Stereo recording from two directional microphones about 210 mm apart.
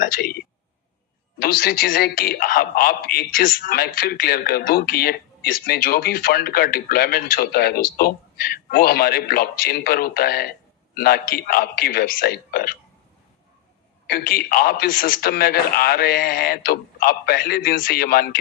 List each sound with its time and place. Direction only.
0.0 s a sound: 45° left (ahead or behind)
1.4 s a man's voice: 45° left (ahead or behind)
14.1 s a man's voice: 45° left (ahead or behind)